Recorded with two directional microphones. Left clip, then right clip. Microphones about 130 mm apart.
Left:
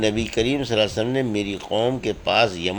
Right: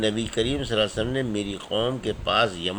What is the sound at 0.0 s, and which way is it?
A man's voice, 40° left (ahead or behind).